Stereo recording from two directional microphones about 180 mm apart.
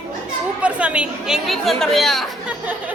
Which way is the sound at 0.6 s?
5° right (ahead or behind).